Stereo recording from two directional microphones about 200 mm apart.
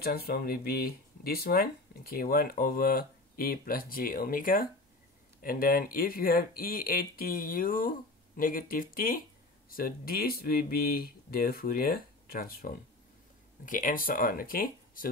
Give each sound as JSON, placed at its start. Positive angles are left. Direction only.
{"t": 0.0, "sound": "speech", "side_deg": 50}